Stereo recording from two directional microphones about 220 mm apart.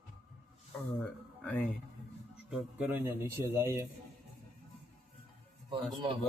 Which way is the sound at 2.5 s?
5° right (ahead or behind).